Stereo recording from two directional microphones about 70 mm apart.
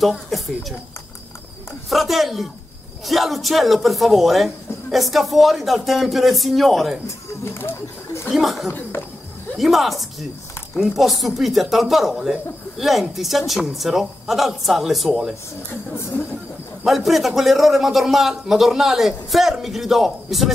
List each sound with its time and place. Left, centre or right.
1.9 s a man's voice: centre
7.5 s speech: left
8.3 s a man's voice: centre
16.8 s a man's voice: centre